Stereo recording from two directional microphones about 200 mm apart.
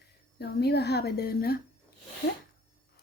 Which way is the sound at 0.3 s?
55° left (ahead or behind).